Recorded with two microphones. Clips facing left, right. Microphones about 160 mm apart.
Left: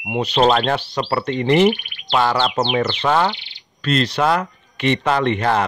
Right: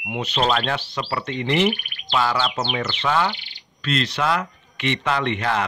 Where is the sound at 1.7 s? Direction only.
45° right (ahead or behind).